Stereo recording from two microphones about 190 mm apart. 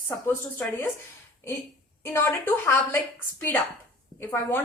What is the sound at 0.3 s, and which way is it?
Speech, 10° left (ahead or behind).